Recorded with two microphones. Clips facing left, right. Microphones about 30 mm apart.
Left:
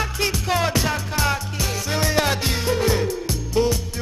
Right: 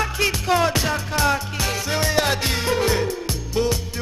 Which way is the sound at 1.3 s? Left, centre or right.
Centre.